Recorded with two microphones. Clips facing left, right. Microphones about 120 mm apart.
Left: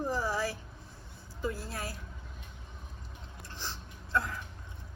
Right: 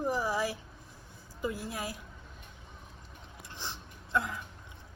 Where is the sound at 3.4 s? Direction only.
15° right (ahead or behind).